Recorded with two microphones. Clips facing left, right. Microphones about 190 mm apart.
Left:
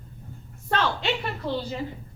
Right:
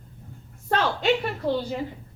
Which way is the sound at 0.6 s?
45° right (ahead or behind).